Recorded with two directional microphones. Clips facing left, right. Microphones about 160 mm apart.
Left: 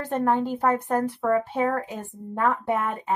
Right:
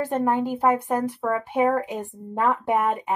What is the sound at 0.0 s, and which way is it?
Speech, 10° right (ahead or behind).